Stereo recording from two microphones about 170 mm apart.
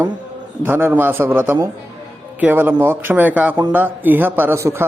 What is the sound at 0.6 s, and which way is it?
Speech, 10° right (ahead or behind).